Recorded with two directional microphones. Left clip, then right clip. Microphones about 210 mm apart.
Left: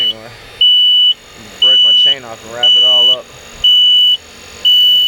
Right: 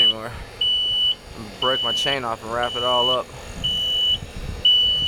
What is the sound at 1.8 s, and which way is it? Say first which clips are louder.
Speech: left 13 dB; 5° right (ahead or behind).